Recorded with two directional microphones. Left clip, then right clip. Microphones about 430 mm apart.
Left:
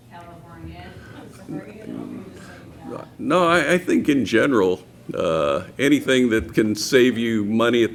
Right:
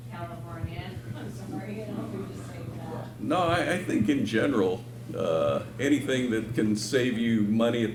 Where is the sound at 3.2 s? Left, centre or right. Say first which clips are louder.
Left 8 dB; left.